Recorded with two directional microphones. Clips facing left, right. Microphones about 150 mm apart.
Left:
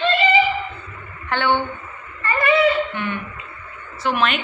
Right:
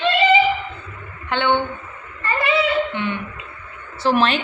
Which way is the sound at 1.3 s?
20° right (ahead or behind).